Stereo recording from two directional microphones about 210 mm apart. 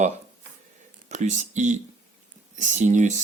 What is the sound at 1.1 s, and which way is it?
Speech, 35° right (ahead or behind).